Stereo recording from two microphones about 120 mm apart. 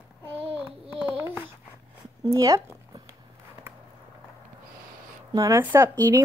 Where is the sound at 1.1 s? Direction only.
15° right (ahead or behind).